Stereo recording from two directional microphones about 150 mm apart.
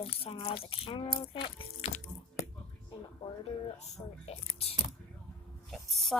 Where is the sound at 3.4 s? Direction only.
45° left (ahead or behind).